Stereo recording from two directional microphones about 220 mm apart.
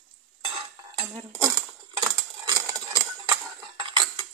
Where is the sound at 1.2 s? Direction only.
20° right (ahead or behind).